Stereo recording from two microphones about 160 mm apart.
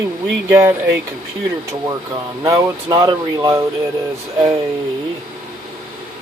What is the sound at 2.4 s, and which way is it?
Speech, 20° right (ahead or behind).